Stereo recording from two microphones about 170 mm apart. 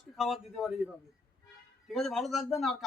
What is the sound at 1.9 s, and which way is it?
Speech, centre (ahead or behind).